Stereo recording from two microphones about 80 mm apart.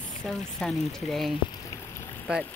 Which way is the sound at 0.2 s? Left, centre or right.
Centre.